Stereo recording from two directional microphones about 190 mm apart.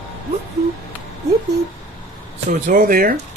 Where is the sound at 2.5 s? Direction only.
45° right (ahead or behind).